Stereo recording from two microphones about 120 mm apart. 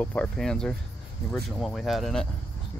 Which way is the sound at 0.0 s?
10° left (ahead or behind).